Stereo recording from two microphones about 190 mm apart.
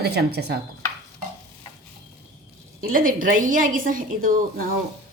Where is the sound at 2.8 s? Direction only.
50° right (ahead or behind).